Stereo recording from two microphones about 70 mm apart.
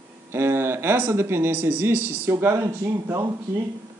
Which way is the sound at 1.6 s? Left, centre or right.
Right.